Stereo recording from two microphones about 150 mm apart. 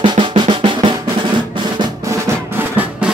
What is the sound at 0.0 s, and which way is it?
Drum, 35° right (ahead or behind).